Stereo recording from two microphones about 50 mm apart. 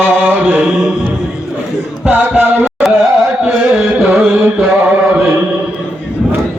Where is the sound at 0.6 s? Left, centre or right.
Centre.